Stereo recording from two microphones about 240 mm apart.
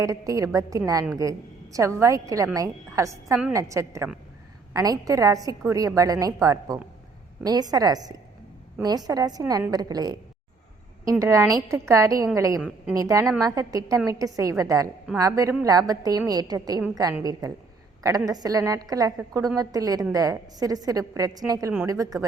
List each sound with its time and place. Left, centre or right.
0.0 s a woman's voice: centre